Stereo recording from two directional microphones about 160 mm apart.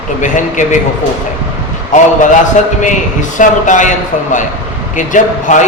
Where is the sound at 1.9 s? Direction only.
50° left (ahead or behind).